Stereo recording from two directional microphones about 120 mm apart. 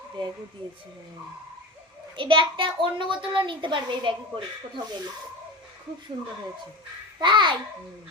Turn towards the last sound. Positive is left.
turn(degrees=-40)  # may be behind; listen again after turning